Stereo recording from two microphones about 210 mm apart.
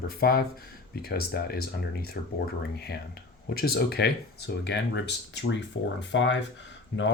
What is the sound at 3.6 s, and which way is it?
Speech, 50° left (ahead or behind).